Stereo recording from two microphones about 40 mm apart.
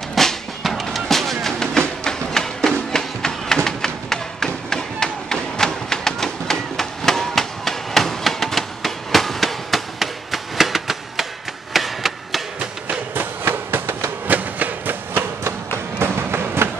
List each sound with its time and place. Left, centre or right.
0.1 s music: centre
2.9 s thump: centre
11.7 s chop: centre
13.1 s a sound: right
13.5 s train: right
14.2 s a sound: right
16.0 s train: right